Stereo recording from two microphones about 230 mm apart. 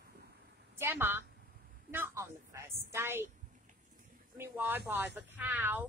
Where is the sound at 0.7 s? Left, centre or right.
Centre.